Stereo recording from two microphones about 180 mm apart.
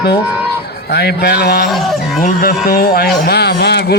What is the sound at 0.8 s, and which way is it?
Mantra, 65° left (ahead or behind).